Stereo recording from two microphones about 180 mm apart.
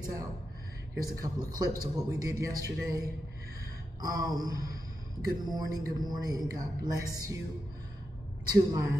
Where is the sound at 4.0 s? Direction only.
20° right (ahead or behind).